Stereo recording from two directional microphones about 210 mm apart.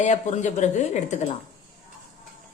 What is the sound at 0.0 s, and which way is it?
Speech, 35° left (ahead or behind).